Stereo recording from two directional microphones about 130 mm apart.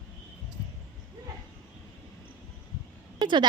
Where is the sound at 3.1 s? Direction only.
35° right (ahead or behind).